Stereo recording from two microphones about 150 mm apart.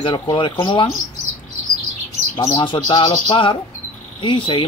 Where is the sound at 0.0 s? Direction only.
35° left (ahead or behind).